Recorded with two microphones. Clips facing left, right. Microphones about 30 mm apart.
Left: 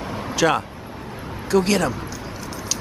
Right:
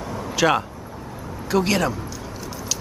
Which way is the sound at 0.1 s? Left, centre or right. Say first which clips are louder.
Left 1 dB; left.